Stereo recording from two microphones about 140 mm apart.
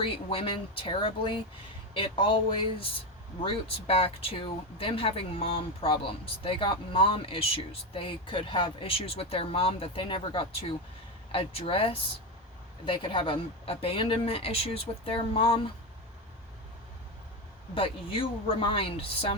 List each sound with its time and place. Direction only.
0.0 s speech: 40° left (ahead or behind)
17.7 s speech: 40° left (ahead or behind)